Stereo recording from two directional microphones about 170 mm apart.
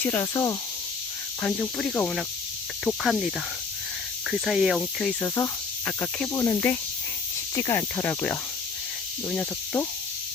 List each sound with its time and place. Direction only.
0.0 s speech: 15° left (ahead or behind)
2.8 s cricket: centre (ahead or behind)
5.2 s speech: 15° left (ahead or behind)
9.3 s cricket: 5° left (ahead or behind)